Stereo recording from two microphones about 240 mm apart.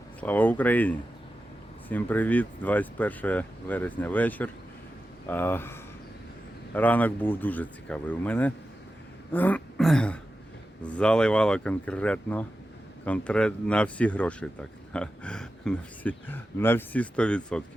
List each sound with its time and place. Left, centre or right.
0.2 s speech: centre
6.7 s speech: centre